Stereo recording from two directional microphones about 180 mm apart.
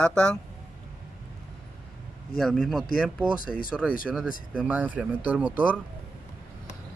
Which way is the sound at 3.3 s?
50° left (ahead or behind).